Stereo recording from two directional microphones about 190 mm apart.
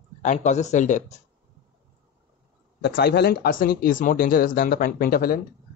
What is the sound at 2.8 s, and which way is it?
Speech, 60° left (ahead or behind).